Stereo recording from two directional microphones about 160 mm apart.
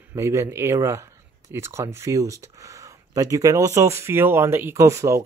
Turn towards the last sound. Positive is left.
turn(degrees=-20)  # may be behind; listen again after turning